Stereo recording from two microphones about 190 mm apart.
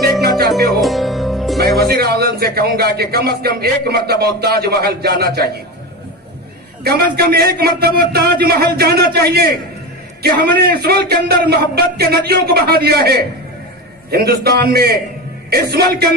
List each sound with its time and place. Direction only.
0.3 s music: centre (ahead or behind)
1.8 s a man's voice: 55° right (ahead or behind)
6.8 s a man's voice: 55° right (ahead or behind)